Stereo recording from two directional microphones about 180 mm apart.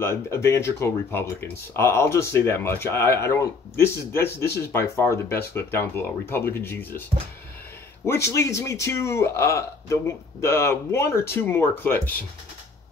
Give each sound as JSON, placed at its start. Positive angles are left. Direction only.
{"t": 0.0, "sound": "speech", "side_deg": 15}
{"t": 8.0, "sound": "speech", "side_deg": 15}